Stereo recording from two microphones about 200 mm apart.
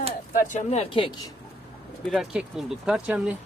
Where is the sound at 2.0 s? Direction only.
Centre (ahead or behind).